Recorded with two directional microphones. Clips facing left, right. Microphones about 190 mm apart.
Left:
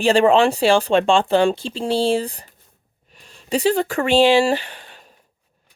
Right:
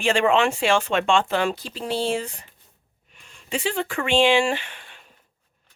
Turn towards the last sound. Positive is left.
turn(degrees=35)  # may be behind; listen again after turning